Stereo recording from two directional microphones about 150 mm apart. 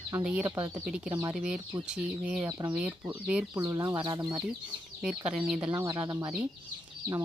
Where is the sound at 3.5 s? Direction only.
25° right (ahead or behind).